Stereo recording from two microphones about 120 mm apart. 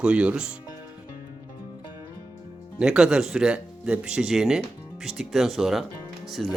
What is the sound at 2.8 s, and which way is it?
Speech, 5° right (ahead or behind).